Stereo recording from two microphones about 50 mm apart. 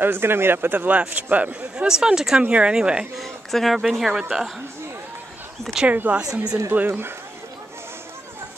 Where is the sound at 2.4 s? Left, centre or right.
Right.